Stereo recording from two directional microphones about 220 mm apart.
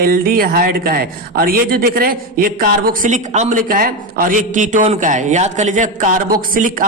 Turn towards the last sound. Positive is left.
turn(degrees=-40)  # may be behind; listen again after turning